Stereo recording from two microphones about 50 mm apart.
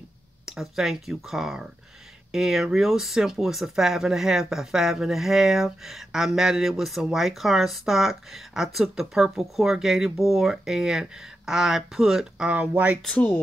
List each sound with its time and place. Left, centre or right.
0.5 s speech: centre
12.4 s speech: right
13.1 s speech: left